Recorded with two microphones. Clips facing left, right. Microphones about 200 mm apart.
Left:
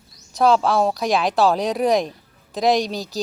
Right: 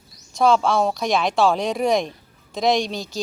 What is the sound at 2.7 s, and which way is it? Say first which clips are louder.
Speech: left 1 dB; 35° left (ahead or behind).